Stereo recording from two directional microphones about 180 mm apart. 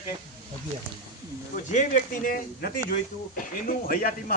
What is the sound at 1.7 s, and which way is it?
Speech, 45° left (ahead or behind).